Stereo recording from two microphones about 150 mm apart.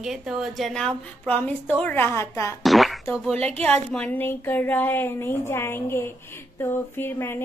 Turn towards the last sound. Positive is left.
turn(degrees=15)  # may be behind; listen again after turning